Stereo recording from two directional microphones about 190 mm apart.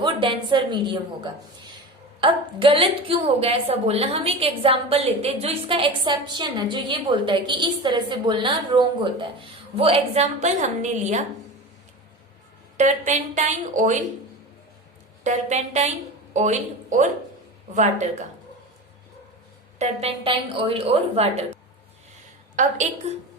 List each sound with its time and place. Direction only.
0.0 s a woman's voice: 25° right (ahead or behind)
12.7 s a woman's voice: 40° right (ahead or behind)
15.2 s a woman's voice: 40° right (ahead or behind)
19.8 s a woman's voice: 35° right (ahead or behind)
22.6 s a woman's voice: 40° right (ahead or behind)